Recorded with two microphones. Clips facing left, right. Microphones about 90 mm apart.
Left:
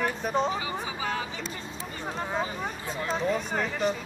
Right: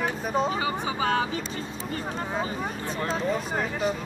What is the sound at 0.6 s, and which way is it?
Speech, 60° right (ahead or behind).